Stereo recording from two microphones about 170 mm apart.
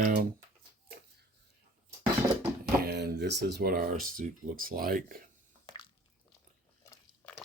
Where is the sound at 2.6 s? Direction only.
75° right (ahead or behind); by 5.2 s 55° right (ahead or behind).